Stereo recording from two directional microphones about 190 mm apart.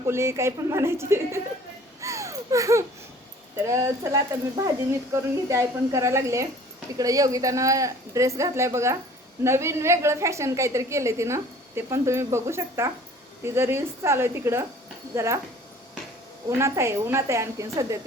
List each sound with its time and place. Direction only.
0.0 s a woman's voice: 15° right (ahead or behind)
2.0 s a sound: 15° right (ahead or behind)
3.7 s a woman's voice: 15° right (ahead or behind)
16.5 s a woman's voice: 15° right (ahead or behind)